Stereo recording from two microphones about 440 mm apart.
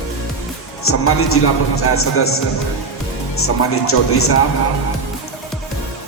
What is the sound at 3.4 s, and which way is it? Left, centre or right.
A man's voice, left.